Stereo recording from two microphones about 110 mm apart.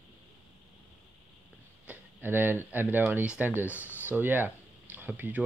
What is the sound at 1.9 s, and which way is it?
Speech, 20° right (ahead or behind).